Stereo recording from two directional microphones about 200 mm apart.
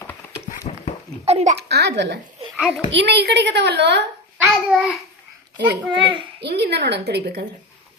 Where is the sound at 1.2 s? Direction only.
30° right (ahead or behind).